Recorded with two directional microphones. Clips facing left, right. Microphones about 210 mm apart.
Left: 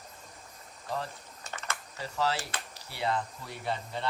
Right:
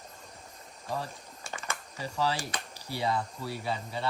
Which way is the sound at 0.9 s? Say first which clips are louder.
Even; 10° right (ahead or behind).